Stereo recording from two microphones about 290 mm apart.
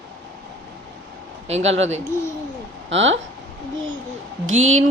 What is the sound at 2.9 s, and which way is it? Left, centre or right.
Speech, right.